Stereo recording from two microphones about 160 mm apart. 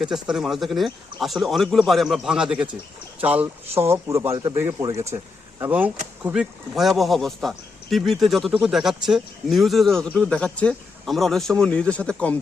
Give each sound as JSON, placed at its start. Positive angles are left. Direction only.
{"t": 0.0, "sound": "speech", "side_deg": -5}
{"t": 6.2, "sound": "speech", "side_deg": -5}